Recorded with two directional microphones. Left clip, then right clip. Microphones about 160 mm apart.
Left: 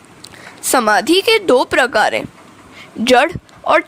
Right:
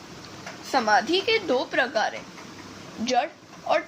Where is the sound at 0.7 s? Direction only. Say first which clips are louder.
Left 9 dB; 65° left (ahead or behind).